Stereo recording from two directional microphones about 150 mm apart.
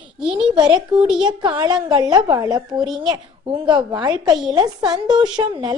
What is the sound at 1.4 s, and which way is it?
A child's voice, 30° right (ahead or behind).